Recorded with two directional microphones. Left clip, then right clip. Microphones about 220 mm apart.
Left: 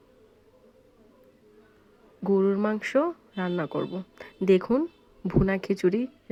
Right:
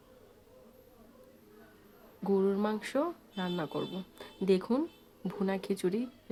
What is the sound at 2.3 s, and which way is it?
Speech, 20° left (ahead or behind).